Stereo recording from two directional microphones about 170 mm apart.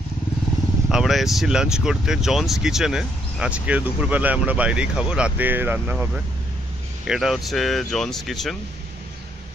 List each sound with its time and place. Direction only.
0.8 s speech: centre (ahead or behind)